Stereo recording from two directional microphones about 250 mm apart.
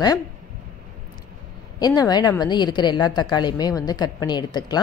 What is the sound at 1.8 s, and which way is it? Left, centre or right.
A woman's voice, centre.